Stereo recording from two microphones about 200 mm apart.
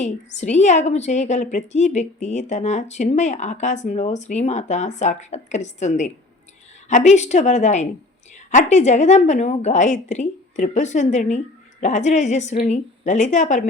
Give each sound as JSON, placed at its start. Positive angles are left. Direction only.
{"t": 0.0, "sound": "a woman's voice", "side_deg": 35}